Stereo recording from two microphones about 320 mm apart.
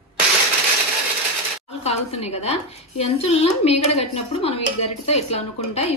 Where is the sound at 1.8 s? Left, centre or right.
Centre.